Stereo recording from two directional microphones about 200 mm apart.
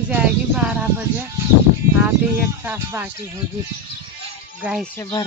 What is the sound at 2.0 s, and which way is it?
Speech, 10° right (ahead or behind).